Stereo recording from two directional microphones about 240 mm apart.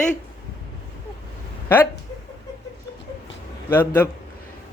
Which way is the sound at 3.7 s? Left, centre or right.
Centre.